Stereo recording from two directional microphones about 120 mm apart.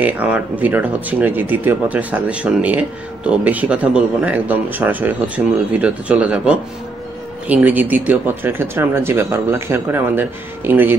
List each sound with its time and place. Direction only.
0.0 s speech: 15° right (ahead or behind)